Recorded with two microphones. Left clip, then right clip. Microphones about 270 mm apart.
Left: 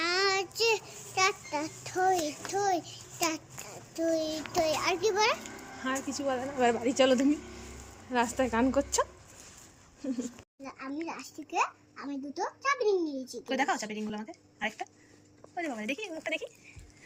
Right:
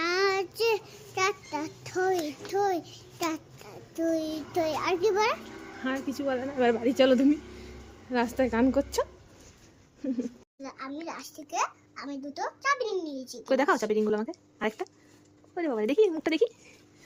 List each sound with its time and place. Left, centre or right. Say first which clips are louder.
0.0 s child singing: right 2 dB; centre
2.5 s a child's voice: right 2 dB; centre